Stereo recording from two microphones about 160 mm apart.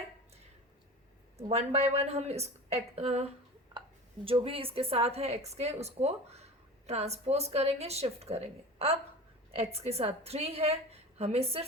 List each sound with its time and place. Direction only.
1.5 s a woman's voice: 40° right (ahead or behind)
3.8 s a sound: 30° right (ahead or behind)
4.3 s a woman's voice: 35° right (ahead or behind)